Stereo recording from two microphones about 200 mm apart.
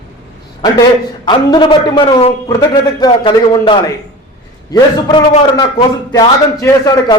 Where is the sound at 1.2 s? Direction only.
25° left (ahead or behind).